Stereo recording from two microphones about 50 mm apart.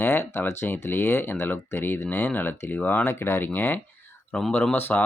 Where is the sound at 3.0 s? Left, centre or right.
Left.